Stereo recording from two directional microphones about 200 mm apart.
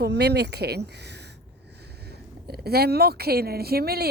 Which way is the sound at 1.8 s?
55° right (ahead or behind).